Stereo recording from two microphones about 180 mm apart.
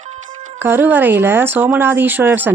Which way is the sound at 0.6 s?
10° right (ahead or behind).